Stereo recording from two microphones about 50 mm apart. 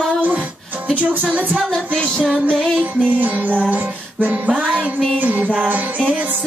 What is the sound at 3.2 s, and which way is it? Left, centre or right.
Music, right.